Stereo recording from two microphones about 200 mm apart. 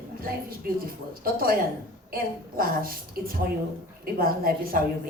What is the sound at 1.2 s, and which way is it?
A woman's voice, 45° right (ahead or behind).